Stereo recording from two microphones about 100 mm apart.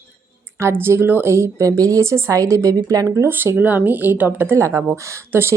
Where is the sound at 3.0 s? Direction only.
25° right (ahead or behind).